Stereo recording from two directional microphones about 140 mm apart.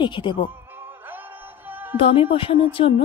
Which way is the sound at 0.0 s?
35° left (ahead or behind).